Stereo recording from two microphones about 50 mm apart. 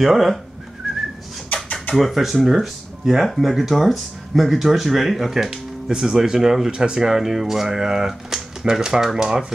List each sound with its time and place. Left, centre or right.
0.0 s speech: centre
1.5 s a sound: left
2.0 s speech: centre